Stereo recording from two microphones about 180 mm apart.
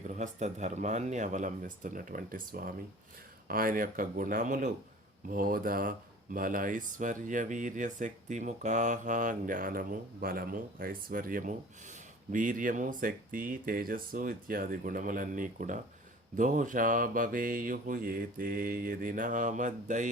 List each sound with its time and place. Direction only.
0.0 s speech: 40° right (ahead or behind)